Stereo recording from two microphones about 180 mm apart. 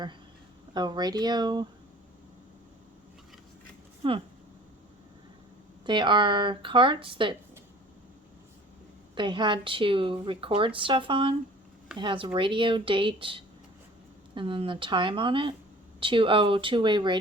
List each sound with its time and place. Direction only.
0.7 s a woman's voice: 25° right (ahead or behind)
4.0 s a woman's voice: 30° right (ahead or behind)
5.8 s a woman's voice: 25° right (ahead or behind)
9.1 s a woman's voice: 25° right (ahead or behind)